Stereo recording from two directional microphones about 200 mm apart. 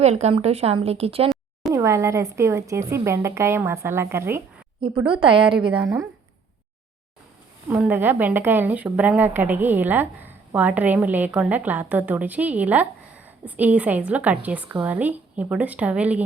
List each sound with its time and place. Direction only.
0.0 s speech: 35° right (ahead or behind)
1.7 s a woman's voice: 15° right (ahead or behind)
5.0 s a woman's voice: 25° right (ahead or behind)
7.7 s a woman's voice: 10° right (ahead or behind)